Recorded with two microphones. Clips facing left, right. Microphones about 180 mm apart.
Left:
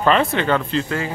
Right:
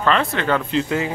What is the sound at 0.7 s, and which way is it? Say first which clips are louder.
Speech: right 2 dB; 15° right (ahead or behind).